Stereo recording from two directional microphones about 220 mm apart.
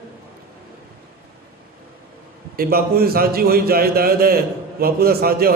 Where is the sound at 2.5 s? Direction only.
45° right (ahead or behind).